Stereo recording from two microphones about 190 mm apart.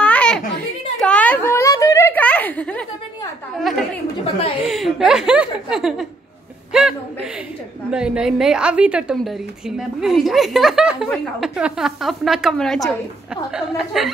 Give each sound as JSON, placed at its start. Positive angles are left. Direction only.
{"t": 0.0, "sound": "a sound", "side_deg": 5}
{"t": 4.4, "sound": "a woman's voice", "side_deg": 30}
{"t": 4.6, "sound": "a woman's voice", "side_deg": 0}
{"t": 6.7, "sound": "chuckle", "side_deg": -5}
{"t": 7.9, "sound": "a woman's voice", "side_deg": -5}